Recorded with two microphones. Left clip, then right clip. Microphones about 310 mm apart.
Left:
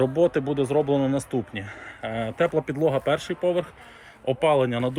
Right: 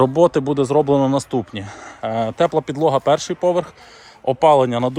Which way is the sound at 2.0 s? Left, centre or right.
Right.